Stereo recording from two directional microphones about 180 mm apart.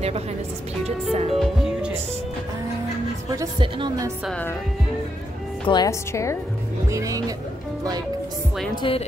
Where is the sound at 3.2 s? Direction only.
25° right (ahead or behind).